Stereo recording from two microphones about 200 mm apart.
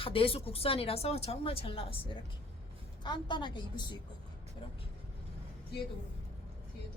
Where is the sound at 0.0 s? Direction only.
25° left (ahead or behind).